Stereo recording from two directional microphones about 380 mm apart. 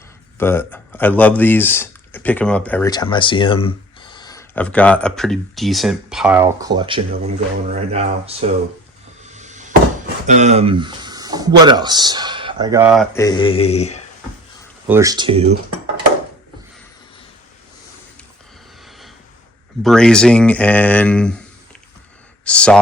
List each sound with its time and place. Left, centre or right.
0.3 s speech: centre
9.3 s a sound: centre
10.2 s speech: centre
14.8 s speech: centre
18.9 s a sound: centre
19.8 s speech: centre
22.4 s speech: centre